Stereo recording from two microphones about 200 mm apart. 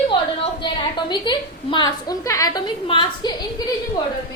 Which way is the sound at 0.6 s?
25° left (ahead or behind).